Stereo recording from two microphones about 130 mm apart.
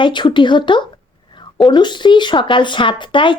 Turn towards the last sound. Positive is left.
turn(degrees=40)  # may be behind; listen again after turning